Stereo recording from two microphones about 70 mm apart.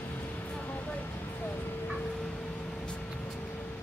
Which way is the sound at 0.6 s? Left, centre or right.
Left.